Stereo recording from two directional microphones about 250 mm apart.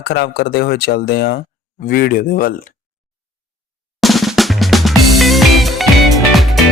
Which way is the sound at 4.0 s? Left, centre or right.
Centre.